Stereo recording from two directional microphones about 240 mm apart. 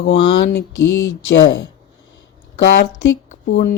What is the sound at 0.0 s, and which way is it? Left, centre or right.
A woman's voice, left.